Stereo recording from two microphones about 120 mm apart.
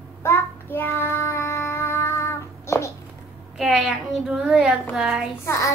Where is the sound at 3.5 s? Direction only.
Centre (ahead or behind).